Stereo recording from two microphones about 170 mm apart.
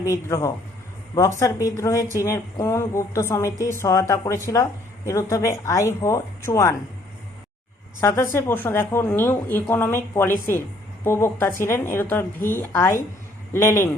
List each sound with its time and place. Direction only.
0.0 s a woman's voice: 15° left (ahead or behind)
8.0 s speech: 15° left (ahead or behind)